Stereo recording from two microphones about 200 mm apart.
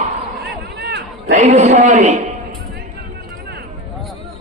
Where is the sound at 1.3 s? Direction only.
35° right (ahead or behind).